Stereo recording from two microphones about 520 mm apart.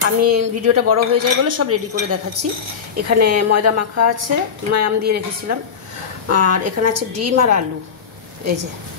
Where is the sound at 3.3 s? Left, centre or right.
Right.